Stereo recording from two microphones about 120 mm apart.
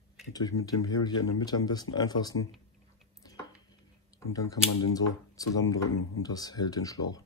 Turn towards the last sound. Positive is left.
turn(degrees=30)  # may be behind; listen again after turning